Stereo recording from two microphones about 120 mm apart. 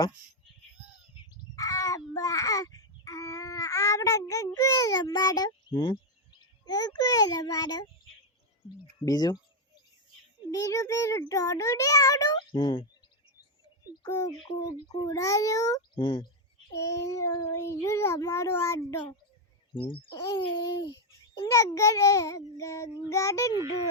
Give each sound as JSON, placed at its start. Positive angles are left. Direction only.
{"t": 1.5, "sound": "child singing", "side_deg": 30}
{"t": 5.7, "sound": "speech", "side_deg": 45}
{"t": 6.7, "sound": "a child's voice", "side_deg": 35}
{"t": 10.5, "sound": "a child's voice", "side_deg": 25}
{"t": 12.5, "sound": "speech", "side_deg": 45}
{"t": 14.0, "sound": "a child's voice", "side_deg": 30}
{"t": 16.0, "sound": "speech", "side_deg": 45}
{"t": 16.7, "sound": "a child's voice", "side_deg": 25}
{"t": 19.7, "sound": "speech", "side_deg": 45}
{"t": 20.1, "sound": "a child's voice", "side_deg": 30}